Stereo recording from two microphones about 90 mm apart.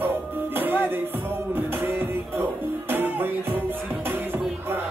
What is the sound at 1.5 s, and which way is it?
Music, 25° right (ahead or behind).